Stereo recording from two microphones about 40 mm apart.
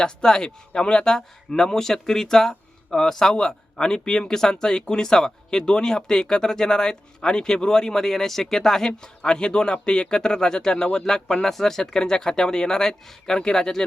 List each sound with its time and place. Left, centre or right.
0.0 s speech: centre
9.0 s speech: left